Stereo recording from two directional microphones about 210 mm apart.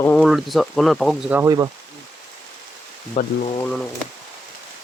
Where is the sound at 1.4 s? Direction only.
20° right (ahead or behind).